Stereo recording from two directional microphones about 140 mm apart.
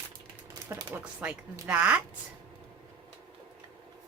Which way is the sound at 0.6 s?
15° right (ahead or behind).